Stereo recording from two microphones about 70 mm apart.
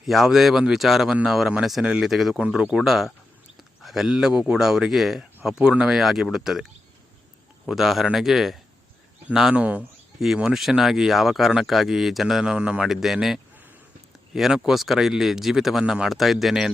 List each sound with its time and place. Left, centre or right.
0.0 s speech: centre
1.8 s speech: centre
2.0 s speech: centre
10.2 s speech: centre